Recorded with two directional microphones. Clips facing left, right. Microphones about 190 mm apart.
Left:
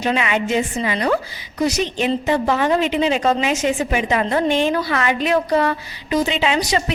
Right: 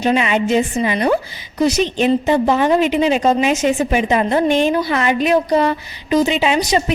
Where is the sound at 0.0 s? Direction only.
25° right (ahead or behind).